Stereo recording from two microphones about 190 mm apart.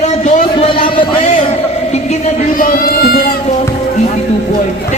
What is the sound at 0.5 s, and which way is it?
Speech, 25° left (ahead or behind).